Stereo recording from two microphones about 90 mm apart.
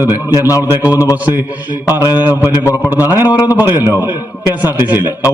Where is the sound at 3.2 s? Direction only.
50° left (ahead or behind).